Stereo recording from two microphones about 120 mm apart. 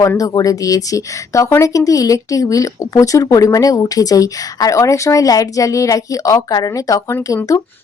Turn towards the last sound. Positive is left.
turn(degrees=30)  # may be behind; listen again after turning